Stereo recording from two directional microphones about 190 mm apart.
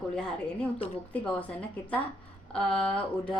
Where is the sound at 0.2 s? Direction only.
5° left (ahead or behind).